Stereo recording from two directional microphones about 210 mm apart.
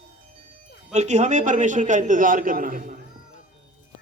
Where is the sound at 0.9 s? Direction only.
35° right (ahead or behind).